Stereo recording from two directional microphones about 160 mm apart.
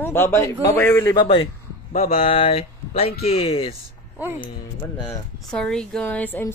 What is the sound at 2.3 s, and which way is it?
Speech, 35° left (ahead or behind).